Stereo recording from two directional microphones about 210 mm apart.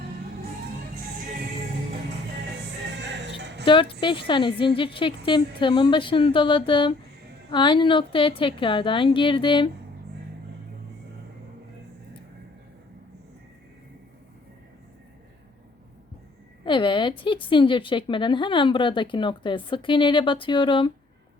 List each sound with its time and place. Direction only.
3.0 s music: 55° right (ahead or behind)
4.0 s a woman's voice: 25° left (ahead or behind)
16.6 s a woman's voice: 25° left (ahead or behind)